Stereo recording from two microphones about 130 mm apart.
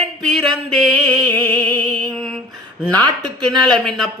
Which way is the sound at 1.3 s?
10° left (ahead or behind).